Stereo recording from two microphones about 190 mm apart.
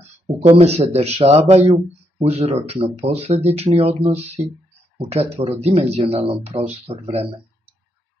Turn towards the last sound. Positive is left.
turn(degrees=-30)  # may be behind; listen again after turning